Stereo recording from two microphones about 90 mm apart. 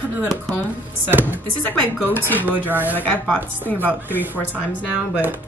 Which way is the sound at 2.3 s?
20° left (ahead or behind).